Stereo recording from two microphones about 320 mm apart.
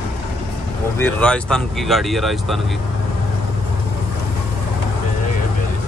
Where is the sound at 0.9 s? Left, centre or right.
Centre.